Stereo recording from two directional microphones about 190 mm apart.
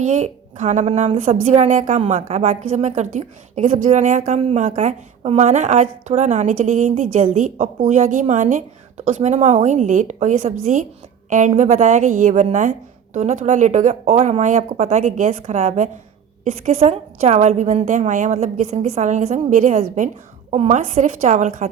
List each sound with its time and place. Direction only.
0.0 s a woman's voice: 40° right (ahead or behind)